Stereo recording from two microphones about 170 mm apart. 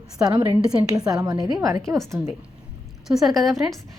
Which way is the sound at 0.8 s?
20° right (ahead or behind).